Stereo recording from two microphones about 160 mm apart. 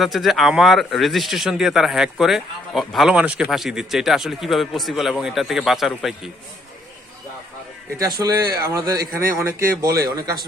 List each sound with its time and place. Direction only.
0.0 s speech: centre (ahead or behind)
7.9 s speech: 25° right (ahead or behind)